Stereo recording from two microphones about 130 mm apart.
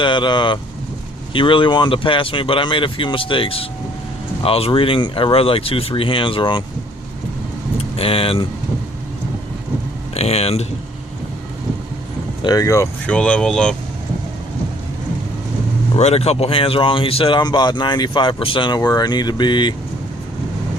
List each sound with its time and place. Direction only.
0.0 s speech: 35° left (ahead or behind)
7.8 s speech: 45° left (ahead or behind)
10.2 s speech: 50° left (ahead or behind)
12.4 s speech: 30° left (ahead or behind)
13.1 s speech: 10° left (ahead or behind)
16.0 s speech: 55° left (ahead or behind)
17.4 s speech: 35° left (ahead or behind)